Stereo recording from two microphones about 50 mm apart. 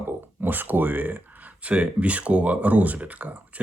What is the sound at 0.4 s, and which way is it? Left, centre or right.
Speech, right.